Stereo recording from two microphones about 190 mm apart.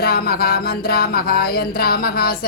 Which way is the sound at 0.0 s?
55° left (ahead or behind).